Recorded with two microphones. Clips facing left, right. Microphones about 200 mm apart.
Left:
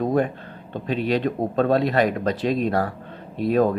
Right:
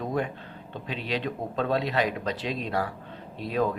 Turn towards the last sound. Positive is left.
turn(degrees=50)  # may be behind; listen again after turning